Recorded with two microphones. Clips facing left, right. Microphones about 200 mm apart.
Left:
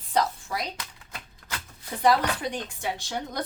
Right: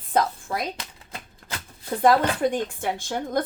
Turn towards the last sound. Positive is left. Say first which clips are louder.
# right 6 dB
turn(degrees=-50)  # may be behind; listen again after turning